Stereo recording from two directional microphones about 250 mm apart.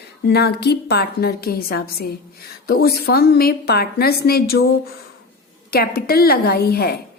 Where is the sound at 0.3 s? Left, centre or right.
Left.